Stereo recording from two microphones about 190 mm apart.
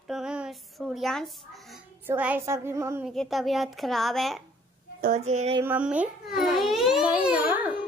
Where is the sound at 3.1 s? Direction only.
Centre (ahead or behind).